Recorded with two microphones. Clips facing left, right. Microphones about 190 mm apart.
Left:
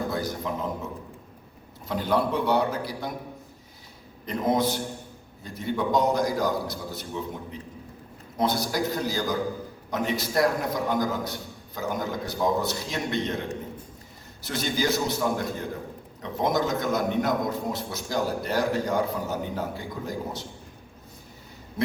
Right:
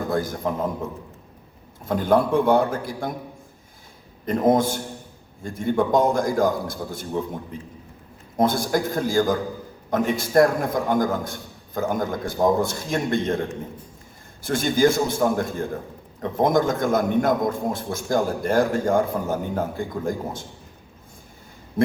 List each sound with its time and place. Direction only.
0.1 s a man's voice: 50° right (ahead or behind)
1.8 s a man's voice: 50° right (ahead or behind)
4.3 s a man's voice: 50° right (ahead or behind)
14.4 s a man's voice: 50° right (ahead or behind)
21.8 s a sound: 50° right (ahead or behind)